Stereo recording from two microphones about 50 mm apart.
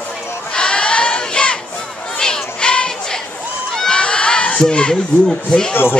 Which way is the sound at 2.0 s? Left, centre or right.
Centre.